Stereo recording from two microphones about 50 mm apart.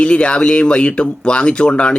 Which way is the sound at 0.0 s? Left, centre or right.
Left.